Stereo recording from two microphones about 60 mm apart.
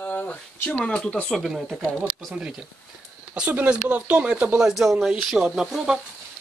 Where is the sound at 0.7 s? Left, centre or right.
Centre.